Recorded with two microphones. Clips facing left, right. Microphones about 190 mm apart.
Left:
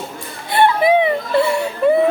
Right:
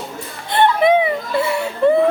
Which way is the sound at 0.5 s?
5° left (ahead or behind).